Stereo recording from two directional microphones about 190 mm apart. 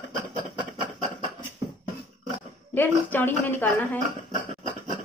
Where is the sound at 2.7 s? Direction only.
10° left (ahead or behind).